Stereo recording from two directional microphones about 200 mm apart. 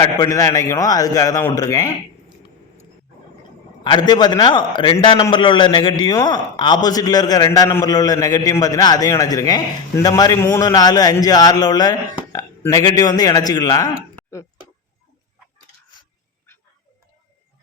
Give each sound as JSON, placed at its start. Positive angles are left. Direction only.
{"t": 0.0, "sound": "a man's voice", "side_deg": 20}
{"t": 3.8, "sound": "a man's voice", "side_deg": 20}